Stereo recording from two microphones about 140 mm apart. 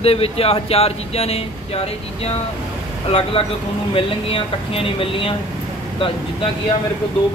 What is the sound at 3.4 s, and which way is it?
Speech, 45° left (ahead or behind).